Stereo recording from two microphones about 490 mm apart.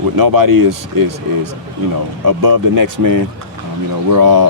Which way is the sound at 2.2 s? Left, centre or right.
Right.